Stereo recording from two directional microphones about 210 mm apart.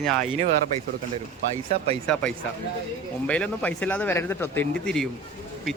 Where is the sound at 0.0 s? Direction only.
5° left (ahead or behind).